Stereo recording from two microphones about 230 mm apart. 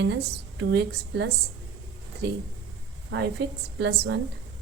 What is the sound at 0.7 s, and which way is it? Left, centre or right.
Speech, right.